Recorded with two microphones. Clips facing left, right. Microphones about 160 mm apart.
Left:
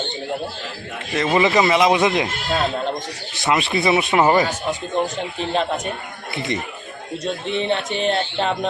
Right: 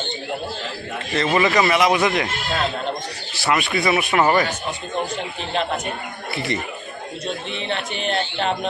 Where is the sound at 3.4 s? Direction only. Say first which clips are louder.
Left 1 dB; 25° left (ahead or behind).